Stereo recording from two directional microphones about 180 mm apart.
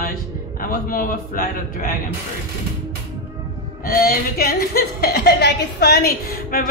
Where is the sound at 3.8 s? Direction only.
55° left (ahead or behind).